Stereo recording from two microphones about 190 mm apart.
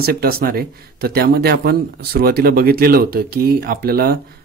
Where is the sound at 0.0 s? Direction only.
50° right (ahead or behind).